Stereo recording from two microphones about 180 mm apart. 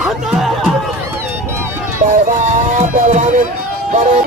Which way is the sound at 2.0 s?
50° right (ahead or behind).